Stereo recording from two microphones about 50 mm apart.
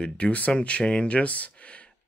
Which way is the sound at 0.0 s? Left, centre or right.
Left.